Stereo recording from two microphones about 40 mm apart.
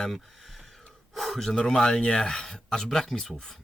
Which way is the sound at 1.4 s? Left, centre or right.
Centre.